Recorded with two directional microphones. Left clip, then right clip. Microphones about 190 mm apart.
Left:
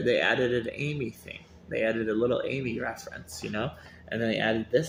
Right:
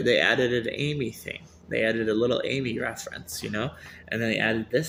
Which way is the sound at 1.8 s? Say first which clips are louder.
Right 3 dB; 15° right (ahead or behind).